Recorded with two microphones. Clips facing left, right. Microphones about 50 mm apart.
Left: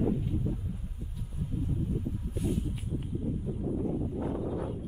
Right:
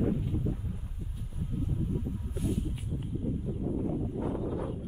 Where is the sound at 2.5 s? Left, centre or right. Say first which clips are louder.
Even; centre.